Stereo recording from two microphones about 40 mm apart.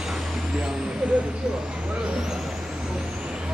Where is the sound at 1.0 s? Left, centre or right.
Right.